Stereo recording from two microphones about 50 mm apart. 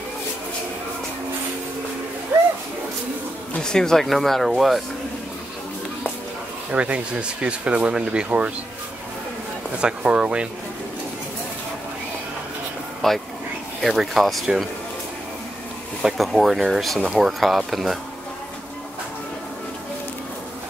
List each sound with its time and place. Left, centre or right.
3.6 s speech: centre
6.7 s speech: right
9.8 s speech: right
13.0 s speech: centre
16.0 s speech: centre